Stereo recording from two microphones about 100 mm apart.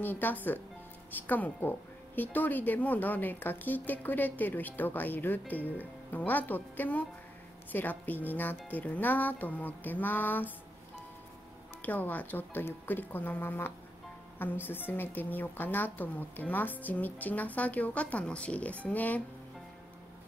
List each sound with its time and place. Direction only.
0.0 s a woman's voice: 20° left (ahead or behind)
11.8 s a woman's voice: 15° left (ahead or behind)